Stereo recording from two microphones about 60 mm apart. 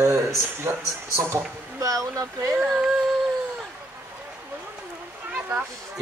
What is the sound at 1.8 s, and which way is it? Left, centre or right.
Speech, right.